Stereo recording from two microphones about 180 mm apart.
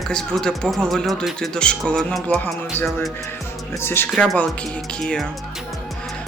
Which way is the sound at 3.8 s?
10° left (ahead or behind).